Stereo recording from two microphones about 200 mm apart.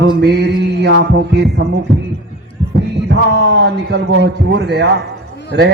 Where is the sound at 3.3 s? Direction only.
55° right (ahead or behind).